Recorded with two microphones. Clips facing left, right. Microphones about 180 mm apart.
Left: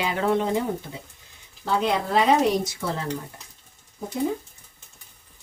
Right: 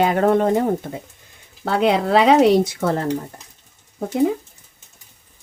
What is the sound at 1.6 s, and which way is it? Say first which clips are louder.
Speech: right 6 dB; 65° right (ahead or behind).